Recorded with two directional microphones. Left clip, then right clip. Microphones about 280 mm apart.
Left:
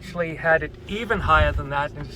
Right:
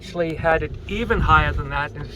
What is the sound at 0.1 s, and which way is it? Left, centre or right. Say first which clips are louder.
Speech: right 3 dB; right.